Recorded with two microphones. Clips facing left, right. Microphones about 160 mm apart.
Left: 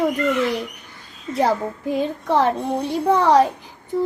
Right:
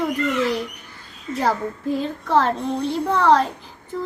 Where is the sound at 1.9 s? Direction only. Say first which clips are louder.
Left 1 dB; 15° left (ahead or behind).